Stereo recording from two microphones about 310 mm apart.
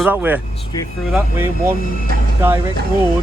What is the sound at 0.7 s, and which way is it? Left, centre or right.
Speech, centre.